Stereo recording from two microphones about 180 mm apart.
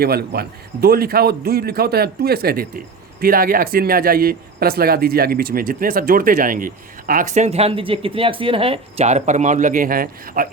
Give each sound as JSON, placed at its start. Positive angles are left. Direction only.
{"t": 0.0, "sound": "a man's voice", "side_deg": -60}